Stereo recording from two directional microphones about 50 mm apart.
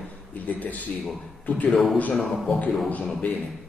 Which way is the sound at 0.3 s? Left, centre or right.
Left.